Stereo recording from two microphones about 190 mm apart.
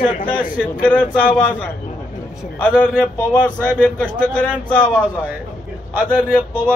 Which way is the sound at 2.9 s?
5° right (ahead or behind).